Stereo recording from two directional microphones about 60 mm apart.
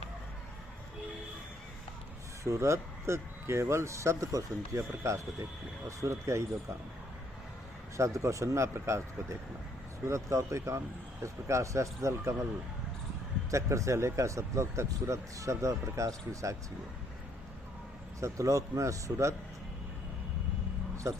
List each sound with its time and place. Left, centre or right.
2.4 s speech: right
4.8 s speech: right
7.9 s speech: right
13.5 s speech: right
18.2 s speech: right
20.9 s a sound: right